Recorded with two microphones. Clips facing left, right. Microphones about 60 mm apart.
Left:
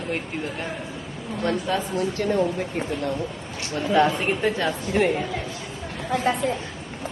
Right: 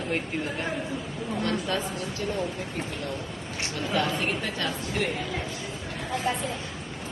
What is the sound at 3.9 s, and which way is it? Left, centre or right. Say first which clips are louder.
A woman's voice: left 8 dB; left.